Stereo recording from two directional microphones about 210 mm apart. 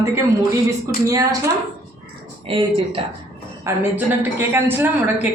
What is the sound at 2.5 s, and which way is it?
Speech, 25° right (ahead or behind).